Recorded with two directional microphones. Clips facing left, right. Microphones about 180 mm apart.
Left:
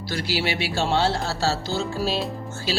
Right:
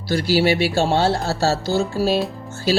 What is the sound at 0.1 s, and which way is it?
Speech, 40° right (ahead or behind).